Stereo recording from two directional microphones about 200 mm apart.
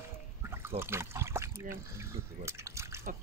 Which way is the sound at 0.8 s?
10° right (ahead or behind).